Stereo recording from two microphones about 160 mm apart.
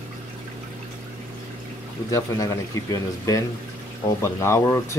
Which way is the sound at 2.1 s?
20° left (ahead or behind).